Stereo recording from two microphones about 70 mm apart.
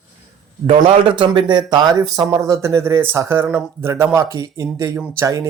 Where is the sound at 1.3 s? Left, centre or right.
Right.